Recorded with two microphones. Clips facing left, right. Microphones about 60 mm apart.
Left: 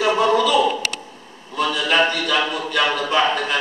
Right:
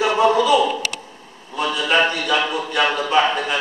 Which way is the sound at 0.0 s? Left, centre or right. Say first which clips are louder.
Right 1 dB; right.